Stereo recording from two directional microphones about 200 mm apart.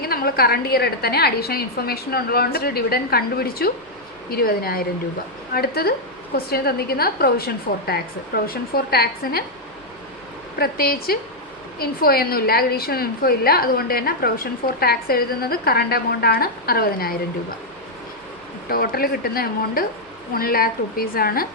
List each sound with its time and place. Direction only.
0.0 s a woman's voice: 50° left (ahead or behind)
10.6 s a woman's voice: 50° left (ahead or behind)
18.7 s a woman's voice: 45° left (ahead or behind)